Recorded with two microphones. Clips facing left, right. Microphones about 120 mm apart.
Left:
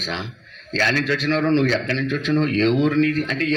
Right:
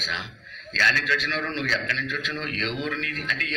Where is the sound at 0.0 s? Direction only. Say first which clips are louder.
Left 5 dB; 35° left (ahead or behind).